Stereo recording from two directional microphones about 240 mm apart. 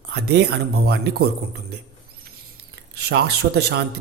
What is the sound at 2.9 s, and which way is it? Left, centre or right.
Speech, right.